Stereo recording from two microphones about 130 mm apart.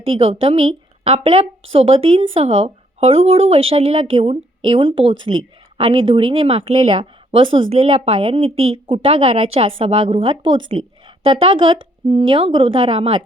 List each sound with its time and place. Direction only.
0.0 s a woman's voice: 45° right (ahead or behind)